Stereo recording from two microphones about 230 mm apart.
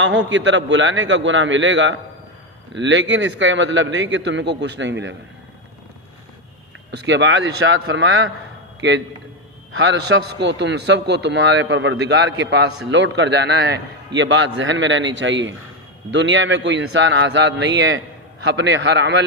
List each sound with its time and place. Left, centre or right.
0.0 s a man's voice: right
6.9 s a man's voice: right